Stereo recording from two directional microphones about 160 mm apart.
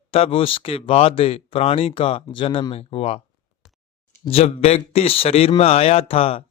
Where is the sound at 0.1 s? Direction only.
35° left (ahead or behind).